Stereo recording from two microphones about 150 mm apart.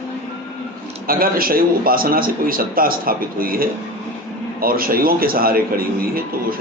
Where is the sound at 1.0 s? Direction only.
75° right (ahead or behind).